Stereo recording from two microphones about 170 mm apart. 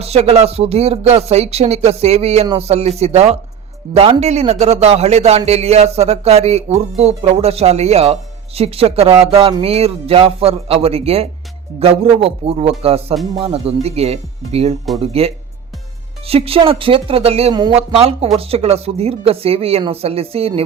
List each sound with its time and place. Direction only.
0.0 s speech: 35° right (ahead or behind)
17.5 s speech: 25° right (ahead or behind)
17.7 s speech: 35° right (ahead or behind)